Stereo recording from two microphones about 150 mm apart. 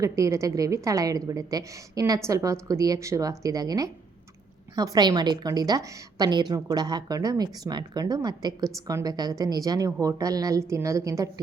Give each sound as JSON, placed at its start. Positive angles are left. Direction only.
{"t": 0.0, "sound": "a woman's voice", "side_deg": -20}